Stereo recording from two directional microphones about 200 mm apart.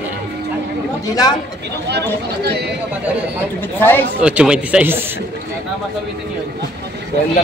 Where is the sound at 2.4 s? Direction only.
55° right (ahead or behind).